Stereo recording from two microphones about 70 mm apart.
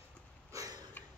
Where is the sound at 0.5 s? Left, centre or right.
Right.